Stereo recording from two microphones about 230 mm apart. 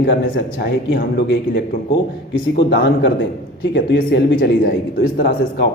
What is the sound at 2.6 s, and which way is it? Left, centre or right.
A man's voice, left.